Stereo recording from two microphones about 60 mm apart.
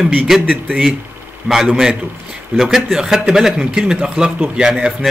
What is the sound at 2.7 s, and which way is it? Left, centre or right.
Speech, centre.